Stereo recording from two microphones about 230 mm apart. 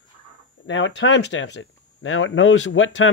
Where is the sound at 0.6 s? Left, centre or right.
Left.